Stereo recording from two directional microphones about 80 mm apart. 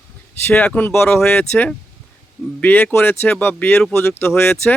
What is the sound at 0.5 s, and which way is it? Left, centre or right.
Speech, centre.